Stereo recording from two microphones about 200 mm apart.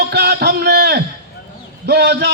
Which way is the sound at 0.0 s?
55° right (ahead or behind).